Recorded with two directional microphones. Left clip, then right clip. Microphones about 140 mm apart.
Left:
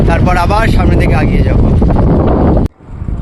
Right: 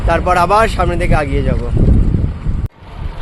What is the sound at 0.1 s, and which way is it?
Speech, 25° right (ahead or behind).